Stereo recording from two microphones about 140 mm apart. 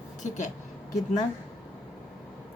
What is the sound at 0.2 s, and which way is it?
Speech, 60° left (ahead or behind).